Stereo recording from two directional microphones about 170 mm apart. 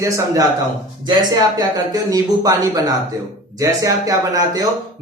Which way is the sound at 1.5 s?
20° right (ahead or behind).